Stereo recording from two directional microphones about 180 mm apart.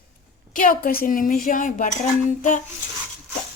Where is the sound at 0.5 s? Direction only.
50° left (ahead or behind).